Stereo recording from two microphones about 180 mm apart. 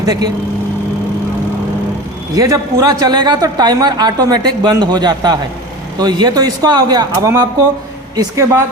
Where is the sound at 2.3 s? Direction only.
20° right (ahead or behind).